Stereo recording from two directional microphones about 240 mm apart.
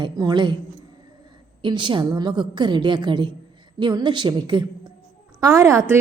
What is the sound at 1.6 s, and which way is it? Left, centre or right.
A woman's voice, centre.